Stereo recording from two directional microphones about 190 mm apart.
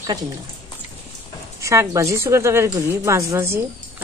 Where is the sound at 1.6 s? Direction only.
15° right (ahead or behind).